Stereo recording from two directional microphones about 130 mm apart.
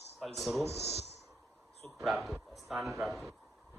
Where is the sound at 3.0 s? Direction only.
Centre (ahead or behind).